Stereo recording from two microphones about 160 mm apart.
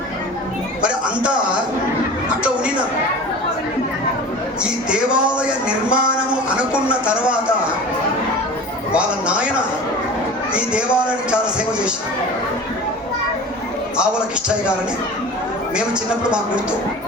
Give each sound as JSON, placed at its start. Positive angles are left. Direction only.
{"t": 0.8, "sound": "a man's voice", "side_deg": -5}
{"t": 4.6, "sound": "speech", "side_deg": -5}
{"t": 8.9, "sound": "speech", "side_deg": -5}
{"t": 10.5, "sound": "speech", "side_deg": -5}